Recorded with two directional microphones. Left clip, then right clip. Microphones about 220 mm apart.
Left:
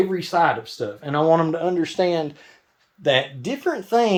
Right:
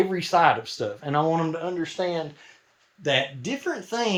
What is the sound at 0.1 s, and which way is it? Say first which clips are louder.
Speech: even; 5° right (ahead or behind).